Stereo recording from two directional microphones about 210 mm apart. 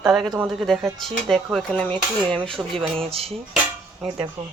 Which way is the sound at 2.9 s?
30° right (ahead or behind).